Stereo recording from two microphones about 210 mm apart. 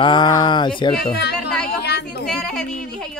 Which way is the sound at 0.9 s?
50° left (ahead or behind).